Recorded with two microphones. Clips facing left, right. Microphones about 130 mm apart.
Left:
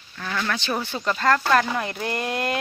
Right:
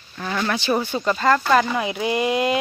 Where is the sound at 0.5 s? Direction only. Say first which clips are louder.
Right 5 dB; 10° right (ahead or behind).